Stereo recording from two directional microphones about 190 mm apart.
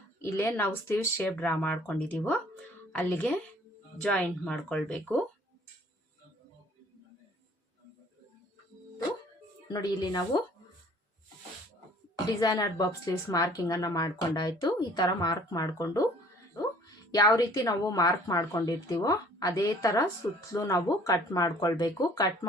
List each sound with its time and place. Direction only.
0.2 s speech: 10° left (ahead or behind)
9.6 s a woman's voice: 20° left (ahead or behind)
12.4 s a woman's voice: 20° left (ahead or behind)